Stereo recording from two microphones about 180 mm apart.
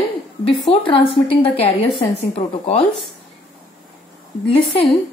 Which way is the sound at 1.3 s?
30° left (ahead or behind).